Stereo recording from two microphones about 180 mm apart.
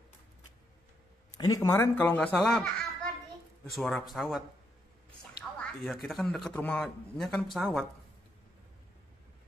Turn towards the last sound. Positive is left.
turn(degrees=0)  # may be behind; listen again after turning